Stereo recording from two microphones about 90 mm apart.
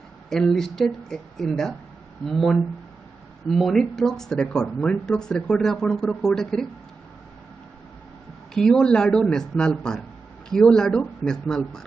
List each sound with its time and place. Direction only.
0.3 s speech: 5° left (ahead or behind)
8.5 s speech: 5° left (ahead or behind)